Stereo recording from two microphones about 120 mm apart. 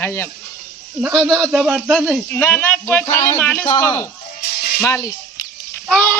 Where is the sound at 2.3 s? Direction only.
15° left (ahead or behind).